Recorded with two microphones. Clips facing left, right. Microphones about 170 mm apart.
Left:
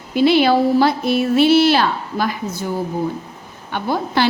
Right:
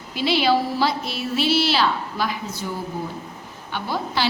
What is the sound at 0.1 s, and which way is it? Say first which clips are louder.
A woman's voice: left 6 dB; 50° left (ahead or behind).